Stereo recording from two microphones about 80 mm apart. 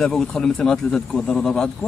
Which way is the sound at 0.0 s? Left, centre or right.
Centre.